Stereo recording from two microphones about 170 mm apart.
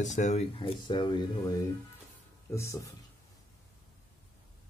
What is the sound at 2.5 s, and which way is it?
Speech, 15° left (ahead or behind).